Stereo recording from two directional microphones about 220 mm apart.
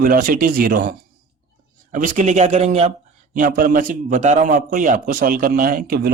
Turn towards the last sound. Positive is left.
turn(degrees=-45)  # may be behind; listen again after turning